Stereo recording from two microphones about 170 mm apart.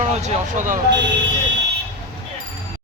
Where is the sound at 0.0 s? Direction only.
40° right (ahead or behind).